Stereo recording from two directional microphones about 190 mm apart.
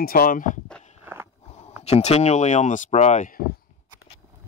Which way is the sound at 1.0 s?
15° right (ahead or behind).